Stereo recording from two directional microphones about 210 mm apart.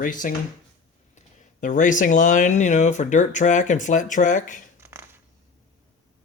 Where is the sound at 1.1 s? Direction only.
40° left (ahead or behind).